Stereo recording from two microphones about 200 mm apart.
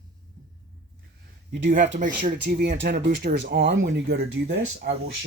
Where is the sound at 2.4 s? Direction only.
55° right (ahead or behind).